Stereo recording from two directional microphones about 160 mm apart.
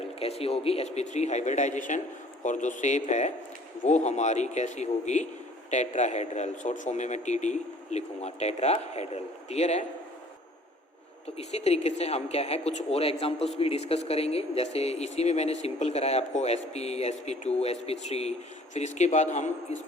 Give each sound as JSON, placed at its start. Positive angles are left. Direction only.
{"t": 0.2, "sound": "speech", "side_deg": 40}
{"t": 11.3, "sound": "speech", "side_deg": 45}